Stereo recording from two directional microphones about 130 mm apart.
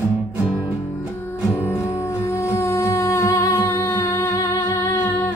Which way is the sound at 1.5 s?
20° left (ahead or behind).